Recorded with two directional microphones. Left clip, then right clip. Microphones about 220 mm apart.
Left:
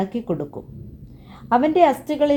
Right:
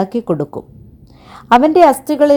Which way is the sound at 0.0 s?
30° right (ahead or behind).